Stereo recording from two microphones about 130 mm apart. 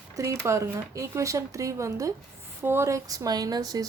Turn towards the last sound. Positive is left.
turn(degrees=-30)  # may be behind; listen again after turning